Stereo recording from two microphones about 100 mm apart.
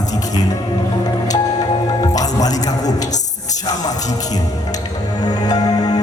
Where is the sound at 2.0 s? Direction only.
40° left (ahead or behind).